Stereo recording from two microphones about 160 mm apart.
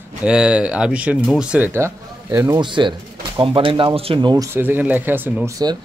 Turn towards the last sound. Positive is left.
turn(degrees=-25)  # may be behind; listen again after turning